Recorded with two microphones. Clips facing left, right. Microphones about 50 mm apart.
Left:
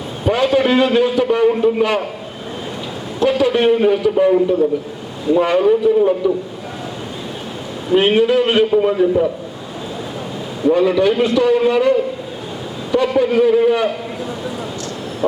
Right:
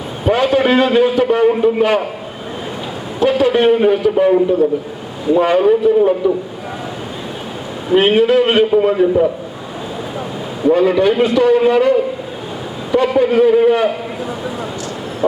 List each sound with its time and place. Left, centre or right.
0.3 s a sound: centre
0.5 s a man's voice: right
3.3 s a man's voice: right
7.9 s a man's voice: centre
10.6 s a man's voice: centre
13.1 s a man's voice: centre